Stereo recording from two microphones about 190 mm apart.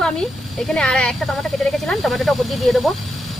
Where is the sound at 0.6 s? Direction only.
5° left (ahead or behind).